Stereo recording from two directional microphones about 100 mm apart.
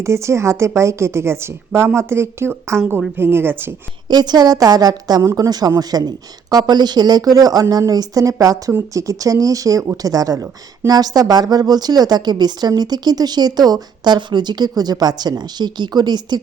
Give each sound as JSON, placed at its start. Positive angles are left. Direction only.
{"t": 0.0, "sound": "a woman's voice", "side_deg": -30}
{"t": 4.1, "sound": "speech", "side_deg": -45}